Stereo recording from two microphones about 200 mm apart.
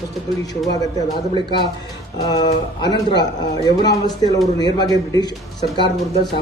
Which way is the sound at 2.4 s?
20° left (ahead or behind).